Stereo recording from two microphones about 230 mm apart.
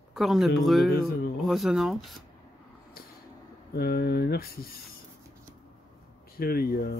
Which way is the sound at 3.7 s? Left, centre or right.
Left.